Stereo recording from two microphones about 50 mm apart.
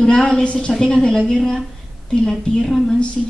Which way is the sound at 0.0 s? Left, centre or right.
Centre.